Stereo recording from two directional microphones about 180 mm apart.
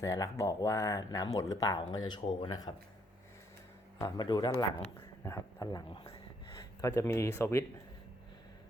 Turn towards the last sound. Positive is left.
turn(degrees=15)  # may be behind; listen again after turning